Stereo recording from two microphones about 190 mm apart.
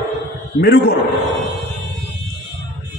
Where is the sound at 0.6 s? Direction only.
55° left (ahead or behind).